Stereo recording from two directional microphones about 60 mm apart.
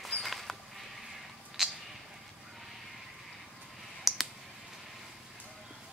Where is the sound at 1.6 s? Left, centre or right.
Centre.